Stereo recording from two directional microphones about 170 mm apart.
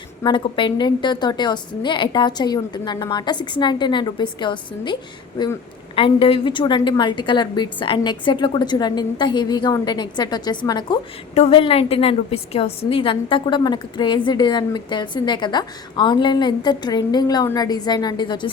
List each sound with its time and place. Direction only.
0.2 s a woman's voice: 25° left (ahead or behind)